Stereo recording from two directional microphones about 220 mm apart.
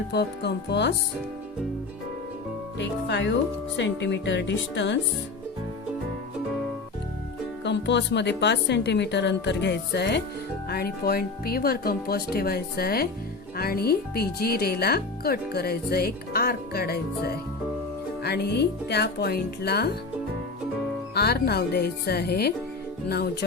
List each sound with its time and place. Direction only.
0.1 s speech: 50° left (ahead or behind)
2.7 s speech: 55° left (ahead or behind)
7.6 s speech: 55° left (ahead or behind)
21.2 s speech: 45° left (ahead or behind)